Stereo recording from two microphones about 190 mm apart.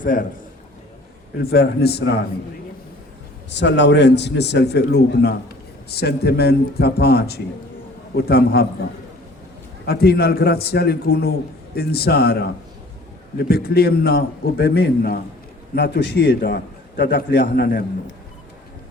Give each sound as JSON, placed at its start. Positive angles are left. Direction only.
{"t": 0.0, "sound": "a man's voice", "side_deg": 45}
{"t": 1.4, "sound": "a man's voice", "side_deg": 55}
{"t": 3.5, "sound": "a man's voice", "side_deg": 65}
{"t": 9.8, "sound": "a man's voice", "side_deg": 55}
{"t": 13.5, "sound": "a man's voice", "side_deg": 55}